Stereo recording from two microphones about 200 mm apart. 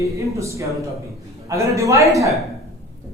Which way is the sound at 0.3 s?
15° right (ahead or behind).